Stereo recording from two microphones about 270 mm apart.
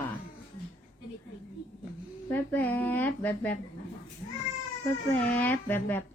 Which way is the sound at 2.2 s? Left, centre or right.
Centre.